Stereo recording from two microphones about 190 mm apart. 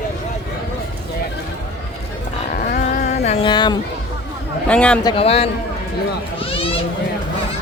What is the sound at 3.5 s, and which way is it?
Speech, 25° left (ahead or behind).